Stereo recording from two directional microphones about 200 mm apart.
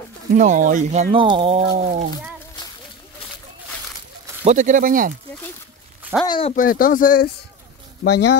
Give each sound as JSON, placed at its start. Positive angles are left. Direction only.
{"t": 0.3, "sound": "speech", "side_deg": -40}
{"t": 1.1, "sound": "speech", "side_deg": -25}
{"t": 4.5, "sound": "speech", "side_deg": -40}
{"t": 6.2, "sound": "speech", "side_deg": 25}
{"t": 6.5, "sound": "speech", "side_deg": 45}
{"t": 8.0, "sound": "speech", "side_deg": 60}